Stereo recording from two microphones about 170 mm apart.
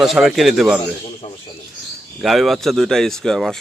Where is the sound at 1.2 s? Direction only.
40° left (ahead or behind).